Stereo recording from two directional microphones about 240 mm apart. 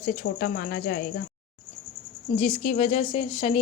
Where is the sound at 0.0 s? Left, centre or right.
Left.